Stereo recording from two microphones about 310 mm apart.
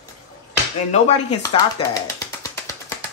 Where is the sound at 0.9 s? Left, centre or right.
Centre.